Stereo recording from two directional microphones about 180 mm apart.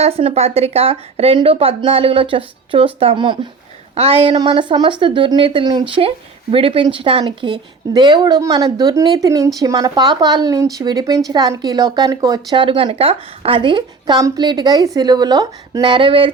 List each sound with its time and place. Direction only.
0.0 s a woman's voice: 35° right (ahead or behind)